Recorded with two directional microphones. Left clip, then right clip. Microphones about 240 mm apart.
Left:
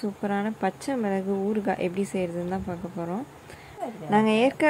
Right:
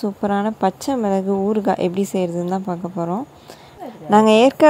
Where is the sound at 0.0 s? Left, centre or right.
Right.